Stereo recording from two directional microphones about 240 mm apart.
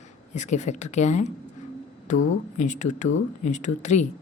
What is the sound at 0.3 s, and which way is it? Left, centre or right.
Speech, left.